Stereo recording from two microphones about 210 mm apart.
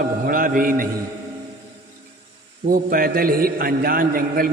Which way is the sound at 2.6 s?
45° right (ahead or behind).